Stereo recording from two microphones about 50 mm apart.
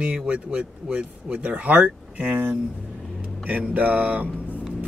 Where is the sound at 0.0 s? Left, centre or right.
Right.